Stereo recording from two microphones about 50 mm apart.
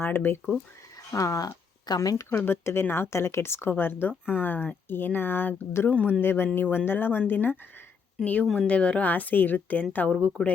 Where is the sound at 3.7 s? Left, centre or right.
Left.